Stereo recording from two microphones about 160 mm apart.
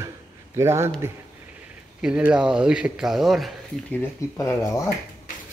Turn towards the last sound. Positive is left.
turn(degrees=20)  # may be behind; listen again after turning